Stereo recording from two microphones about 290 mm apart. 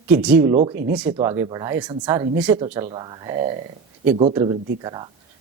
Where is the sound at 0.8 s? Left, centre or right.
Centre.